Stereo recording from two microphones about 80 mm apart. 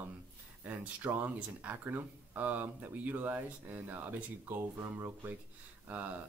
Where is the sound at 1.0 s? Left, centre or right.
Right.